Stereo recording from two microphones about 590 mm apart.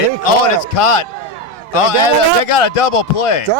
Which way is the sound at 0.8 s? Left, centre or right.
Left.